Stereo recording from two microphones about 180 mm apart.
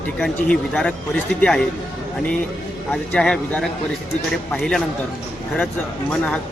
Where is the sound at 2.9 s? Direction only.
5° left (ahead or behind).